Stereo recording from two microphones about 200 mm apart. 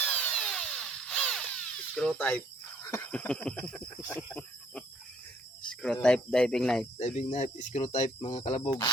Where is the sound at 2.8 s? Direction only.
15° left (ahead or behind).